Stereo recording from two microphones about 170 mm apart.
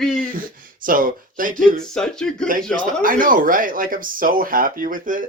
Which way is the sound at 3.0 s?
50° right (ahead or behind).